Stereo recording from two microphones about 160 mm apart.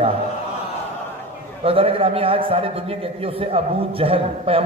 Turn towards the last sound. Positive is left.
turn(degrees=-35)  # may be behind; listen again after turning